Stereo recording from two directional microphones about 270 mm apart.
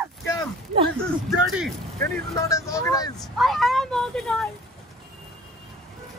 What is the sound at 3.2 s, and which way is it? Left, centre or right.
Speech, centre.